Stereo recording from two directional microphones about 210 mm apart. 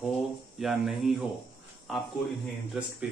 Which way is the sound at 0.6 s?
Centre (ahead or behind).